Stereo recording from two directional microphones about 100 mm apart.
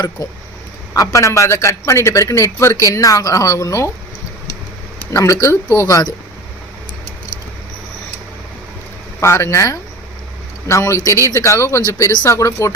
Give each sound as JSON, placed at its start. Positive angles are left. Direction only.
{"t": 0.2, "sound": "a man's voice", "side_deg": 35}
{"t": 5.1, "sound": "a man's voice", "side_deg": 30}
{"t": 9.2, "sound": "a man's voice", "side_deg": 25}